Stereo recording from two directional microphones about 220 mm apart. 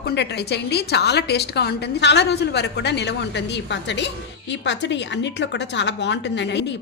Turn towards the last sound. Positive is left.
turn(degrees=50)  # may be behind; listen again after turning